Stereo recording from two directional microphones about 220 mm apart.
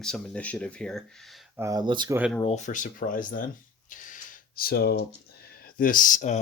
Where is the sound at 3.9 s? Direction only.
35° left (ahead or behind).